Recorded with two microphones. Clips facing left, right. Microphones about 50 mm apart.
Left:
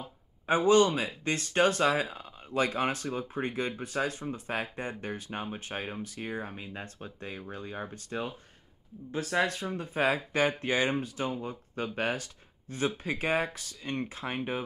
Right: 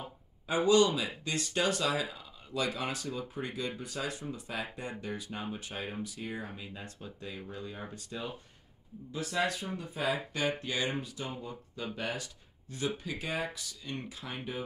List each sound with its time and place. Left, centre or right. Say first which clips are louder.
0.7 s speech: left 2 dB; left